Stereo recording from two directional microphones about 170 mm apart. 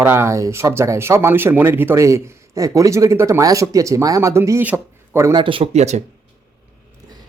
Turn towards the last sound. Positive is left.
turn(degrees=-40)  # may be behind; listen again after turning